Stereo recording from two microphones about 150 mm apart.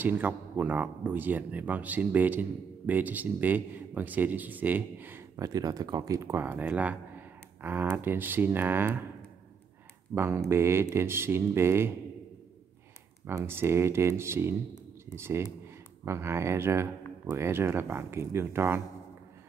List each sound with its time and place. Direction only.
0.0 s speech: 10° right (ahead or behind)
5.4 s speech: 25° right (ahead or behind)
10.1 s speech: 15° right (ahead or behind)
13.3 s speech: 15° right (ahead or behind)